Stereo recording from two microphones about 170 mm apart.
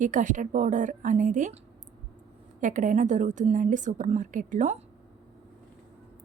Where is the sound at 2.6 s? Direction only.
50° right (ahead or behind).